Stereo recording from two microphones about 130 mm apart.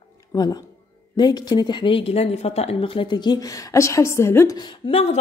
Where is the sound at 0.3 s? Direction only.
30° left (ahead or behind).